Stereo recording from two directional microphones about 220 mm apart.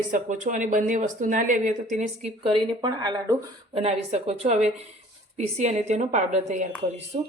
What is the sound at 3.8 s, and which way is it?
Speech, 30° right (ahead or behind).